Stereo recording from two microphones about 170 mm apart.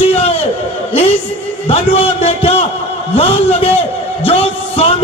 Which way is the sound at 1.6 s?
35° left (ahead or behind).